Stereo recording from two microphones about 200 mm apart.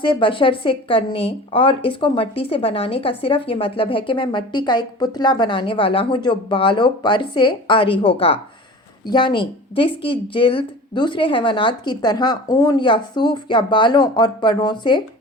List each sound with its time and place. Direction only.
0.0 s a woman's voice: 25° left (ahead or behind)